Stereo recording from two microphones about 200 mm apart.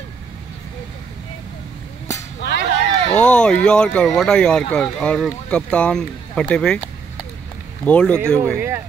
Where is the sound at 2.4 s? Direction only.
60° left (ahead or behind).